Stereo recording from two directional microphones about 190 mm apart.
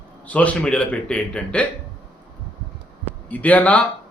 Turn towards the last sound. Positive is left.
turn(degrees=5)  # may be behind; listen again after turning